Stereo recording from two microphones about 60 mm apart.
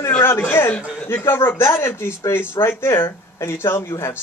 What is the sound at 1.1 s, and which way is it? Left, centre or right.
Speech, left.